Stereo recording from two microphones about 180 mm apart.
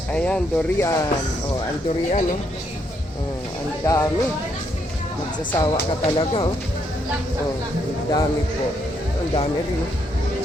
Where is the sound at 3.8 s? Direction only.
15° left (ahead or behind).